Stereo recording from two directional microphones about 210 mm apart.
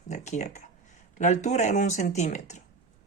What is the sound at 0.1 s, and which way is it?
Speech, 35° left (ahead or behind).